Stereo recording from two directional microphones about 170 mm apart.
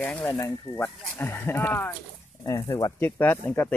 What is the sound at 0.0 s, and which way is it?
Speech, 10° left (ahead or behind).